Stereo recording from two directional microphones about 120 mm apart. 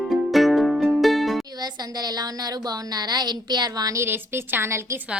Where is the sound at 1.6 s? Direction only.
35° right (ahead or behind).